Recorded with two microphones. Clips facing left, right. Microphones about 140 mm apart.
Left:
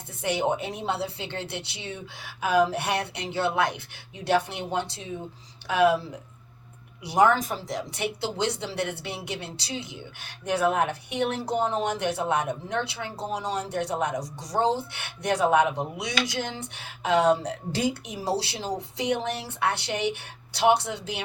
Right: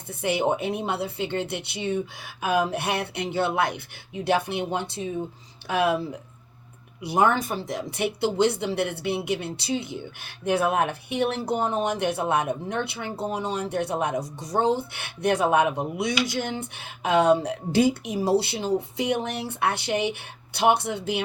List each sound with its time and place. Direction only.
0.1 s speech: 55° right (ahead or behind)